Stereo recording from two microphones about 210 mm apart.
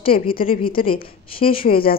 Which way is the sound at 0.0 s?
25° left (ahead or behind).